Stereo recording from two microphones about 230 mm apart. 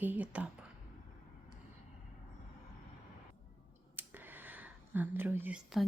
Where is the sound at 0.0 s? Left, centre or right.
Centre.